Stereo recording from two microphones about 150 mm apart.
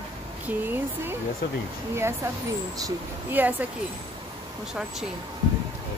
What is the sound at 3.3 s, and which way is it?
Speech, 10° right (ahead or behind).